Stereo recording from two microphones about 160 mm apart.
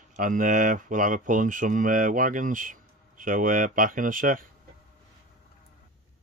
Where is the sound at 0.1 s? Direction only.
55° right (ahead or behind).